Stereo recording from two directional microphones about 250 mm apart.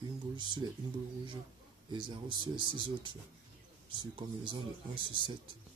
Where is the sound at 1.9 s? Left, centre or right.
Centre.